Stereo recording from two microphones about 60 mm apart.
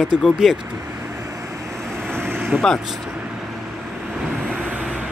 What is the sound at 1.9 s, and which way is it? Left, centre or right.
Vehicle, right.